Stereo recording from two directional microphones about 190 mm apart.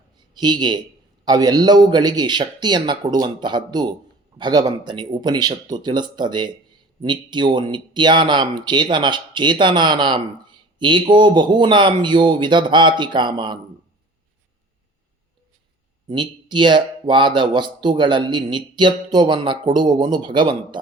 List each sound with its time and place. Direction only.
0.3 s speech: 25° right (ahead or behind)
16.0 s speech: 25° right (ahead or behind)